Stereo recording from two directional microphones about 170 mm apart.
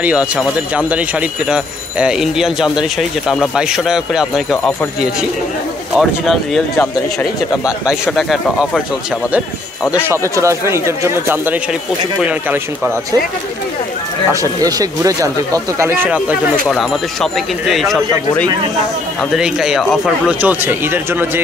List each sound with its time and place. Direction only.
0.0 s speech: 5° right (ahead or behind)
5.9 s speech: centre (ahead or behind)
9.9 s speech: 15° right (ahead or behind)
14.3 s speech: 20° right (ahead or behind)
16.7 s speech: centre (ahead or behind)